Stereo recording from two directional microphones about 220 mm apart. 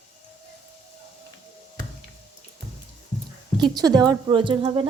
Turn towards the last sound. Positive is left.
turn(degrees=-20)  # may be behind; listen again after turning